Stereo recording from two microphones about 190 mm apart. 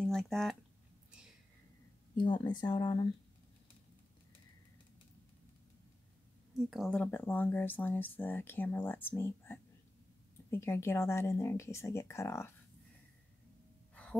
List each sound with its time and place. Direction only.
0.0 s a sound: centre (ahead or behind)
2.1 s speech: 25° left (ahead or behind)
6.7 s speech: 5° left (ahead or behind)